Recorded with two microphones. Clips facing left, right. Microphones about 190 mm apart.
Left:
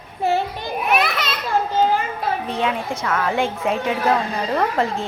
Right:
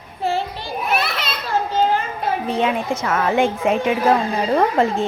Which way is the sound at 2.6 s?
20° right (ahead or behind).